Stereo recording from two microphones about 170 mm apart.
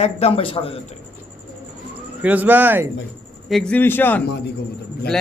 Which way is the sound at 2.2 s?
10° right (ahead or behind).